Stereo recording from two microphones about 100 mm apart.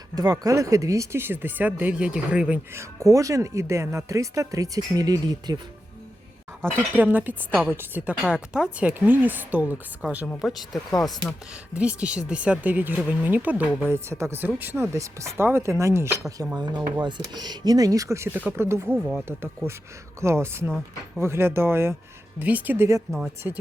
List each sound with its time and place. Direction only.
0.2 s speech: 40° right (ahead or behind); by 2.6 s 10° right (ahead or behind)
2.7 s speech: 30° right (ahead or behind)
6.6 s speech: 20° right (ahead or behind)
10.4 s speech: centre (ahead or behind)
11.7 s speech: 10° right (ahead or behind)
14.9 s speech: 30° right (ahead or behind)
16.6 s speech: 45° right (ahead or behind); by 18.9 s 25° right (ahead or behind)
18.9 s speech: centre (ahead or behind)
20.2 s speech: 25° right (ahead or behind)
23.1 s speech: 35° right (ahead or behind)